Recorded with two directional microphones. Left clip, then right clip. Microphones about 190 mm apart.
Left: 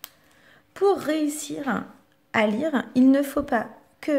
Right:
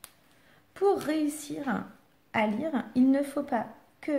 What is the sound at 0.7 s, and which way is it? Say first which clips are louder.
A woman's voice: left 4 dB; 15° left (ahead or behind).